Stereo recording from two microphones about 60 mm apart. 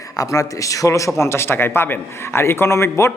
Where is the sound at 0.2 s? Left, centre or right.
Left.